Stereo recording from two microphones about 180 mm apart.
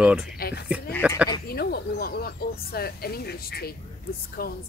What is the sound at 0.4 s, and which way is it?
Speech, 60° left (ahead or behind).